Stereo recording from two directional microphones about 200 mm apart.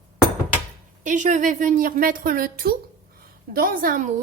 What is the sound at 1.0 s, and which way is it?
A woman's voice, 40° right (ahead or behind).